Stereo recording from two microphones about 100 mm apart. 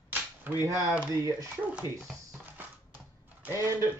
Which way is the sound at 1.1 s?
30° right (ahead or behind).